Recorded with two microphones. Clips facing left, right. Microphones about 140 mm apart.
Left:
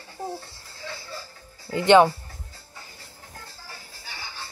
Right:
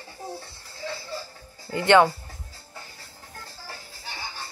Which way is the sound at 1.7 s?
20° left (ahead or behind).